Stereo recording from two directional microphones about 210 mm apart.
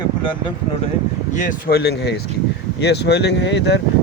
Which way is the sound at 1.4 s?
50° left (ahead or behind).